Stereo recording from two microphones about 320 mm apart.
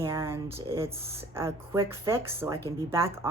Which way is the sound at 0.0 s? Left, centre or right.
Centre.